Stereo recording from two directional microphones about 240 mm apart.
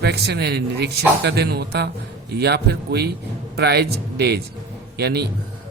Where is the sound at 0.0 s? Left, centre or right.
Right.